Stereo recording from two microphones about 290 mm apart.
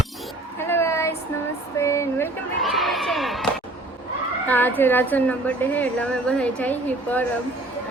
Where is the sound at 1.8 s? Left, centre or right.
Centre.